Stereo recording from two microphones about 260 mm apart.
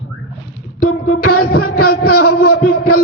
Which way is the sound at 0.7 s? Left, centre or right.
Left.